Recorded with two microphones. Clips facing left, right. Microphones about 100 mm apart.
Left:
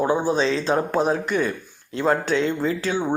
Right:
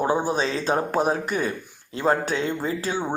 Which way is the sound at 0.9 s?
45° right (ahead or behind).